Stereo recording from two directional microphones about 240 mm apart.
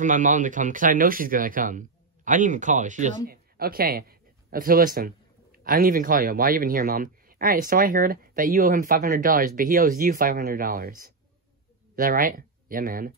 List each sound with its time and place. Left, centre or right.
0.0 s speech: right